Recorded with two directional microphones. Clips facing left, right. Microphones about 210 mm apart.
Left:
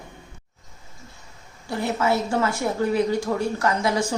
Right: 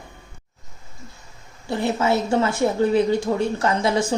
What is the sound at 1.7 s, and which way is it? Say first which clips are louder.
A woman's voice: right 2 dB; 25° right (ahead or behind).